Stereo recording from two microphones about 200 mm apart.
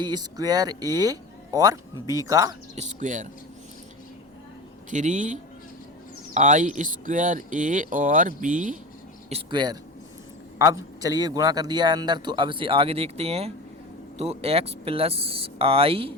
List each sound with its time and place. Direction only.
0.0 s speech: 20° right (ahead or behind)
2.7 s speech: 40° right (ahead or behind)
4.9 s speech: 40° right (ahead or behind)
9.3 s speech: 20° right (ahead or behind)